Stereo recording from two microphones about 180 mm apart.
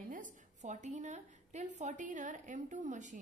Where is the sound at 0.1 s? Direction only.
45° right (ahead or behind).